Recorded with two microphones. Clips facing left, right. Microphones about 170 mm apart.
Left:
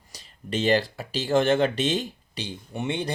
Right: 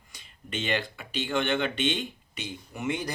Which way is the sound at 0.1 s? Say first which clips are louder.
Left 6 dB; 35° left (ahead or behind).